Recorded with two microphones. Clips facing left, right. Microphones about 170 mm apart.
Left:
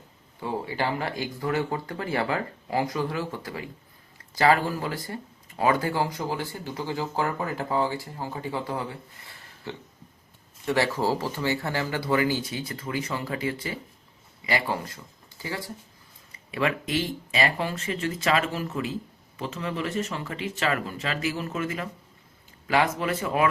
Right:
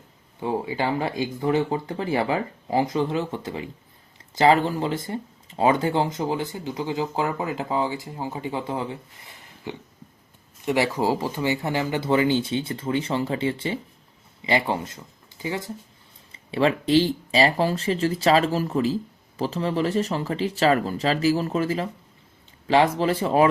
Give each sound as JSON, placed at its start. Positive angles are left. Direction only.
{"t": 0.3, "sound": "speech", "side_deg": -15}